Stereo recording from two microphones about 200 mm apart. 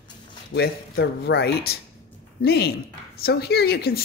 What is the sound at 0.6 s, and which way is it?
Speech, 55° left (ahead or behind).